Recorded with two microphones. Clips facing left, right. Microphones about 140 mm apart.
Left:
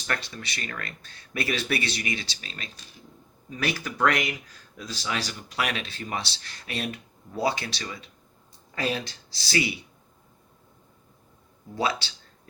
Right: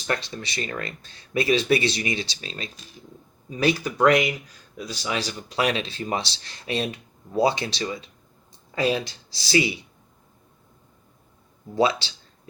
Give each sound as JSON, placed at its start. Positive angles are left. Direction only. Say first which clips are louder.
{"t": 0.1, "sound": "speech", "louder": "right 4 dB", "side_deg": -25}
{"t": 3.6, "sound": "speech", "louder": "right 6 dB", "side_deg": -20}
{"t": 11.7, "sound": "speech", "louder": "right 6 dB", "side_deg": -20}